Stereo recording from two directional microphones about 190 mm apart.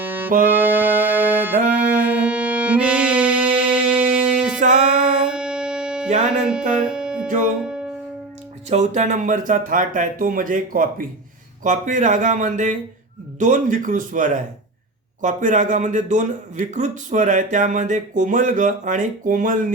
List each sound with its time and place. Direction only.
0.0 s music: 10° right (ahead or behind)
7.3 s speech: 45° right (ahead or behind)
7.6 s music: 5° right (ahead or behind)
8.7 s a man's voice: 35° right (ahead or behind)